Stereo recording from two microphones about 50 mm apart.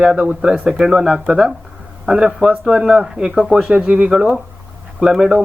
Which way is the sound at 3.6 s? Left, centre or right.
Right.